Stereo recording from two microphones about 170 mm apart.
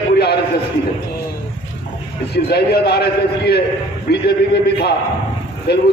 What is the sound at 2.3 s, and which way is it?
A man's voice, 70° left (ahead or behind).